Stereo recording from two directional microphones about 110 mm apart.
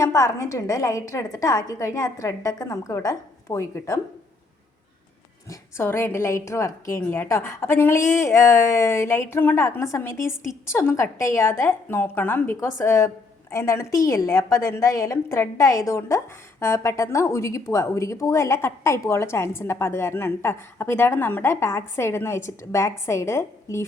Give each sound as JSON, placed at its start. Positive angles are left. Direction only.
{"t": 0.0, "sound": "a woman's voice", "side_deg": 30}
{"t": 5.5, "sound": "a woman's voice", "side_deg": 20}